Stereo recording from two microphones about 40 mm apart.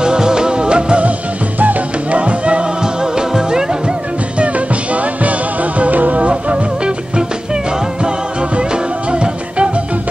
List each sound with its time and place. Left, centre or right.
0.0 s music: centre
1.6 s music: right
2.8 s music: centre
4.4 s music: right